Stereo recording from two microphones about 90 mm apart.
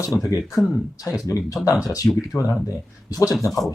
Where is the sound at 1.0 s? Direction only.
40° left (ahead or behind).